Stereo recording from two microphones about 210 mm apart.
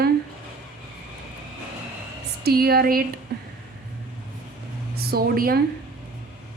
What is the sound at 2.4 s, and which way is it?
Speech, 45° right (ahead or behind).